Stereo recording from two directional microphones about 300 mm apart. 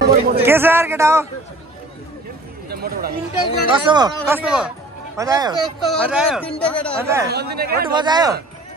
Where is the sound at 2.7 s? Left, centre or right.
Right.